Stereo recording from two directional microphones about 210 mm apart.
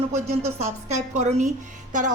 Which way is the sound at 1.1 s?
35° right (ahead or behind).